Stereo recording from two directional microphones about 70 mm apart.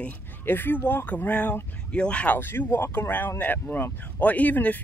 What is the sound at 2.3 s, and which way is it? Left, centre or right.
Speech, left.